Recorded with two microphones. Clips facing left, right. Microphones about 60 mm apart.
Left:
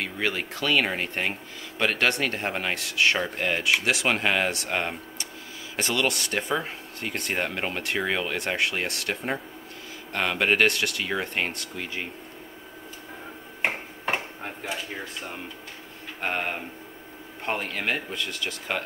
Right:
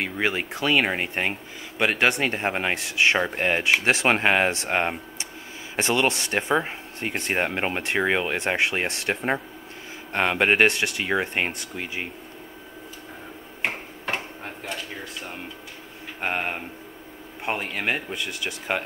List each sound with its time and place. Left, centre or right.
0.0 s speech: right
13.6 s finger snapping: centre
16.2 s speech: centre